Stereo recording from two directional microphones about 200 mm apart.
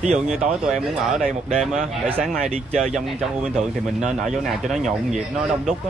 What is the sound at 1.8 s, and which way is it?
Speech, 30° right (ahead or behind).